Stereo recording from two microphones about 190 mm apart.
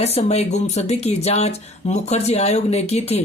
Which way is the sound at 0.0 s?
35° left (ahead or behind).